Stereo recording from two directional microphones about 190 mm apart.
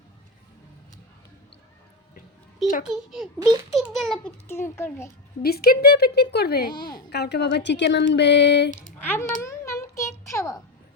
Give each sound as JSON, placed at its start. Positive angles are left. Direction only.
{"t": 2.8, "sound": "a child's voice", "side_deg": 0}
{"t": 4.4, "sound": "speech", "side_deg": 15}
{"t": 5.4, "sound": "speech", "side_deg": 55}
{"t": 6.7, "sound": "a woman's voice", "side_deg": 20}
{"t": 7.1, "sound": "speech", "side_deg": 60}
{"t": 9.0, "sound": "a sound", "side_deg": 10}